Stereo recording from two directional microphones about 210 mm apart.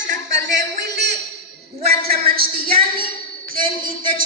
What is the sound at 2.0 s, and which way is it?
Speech, 45° right (ahead or behind).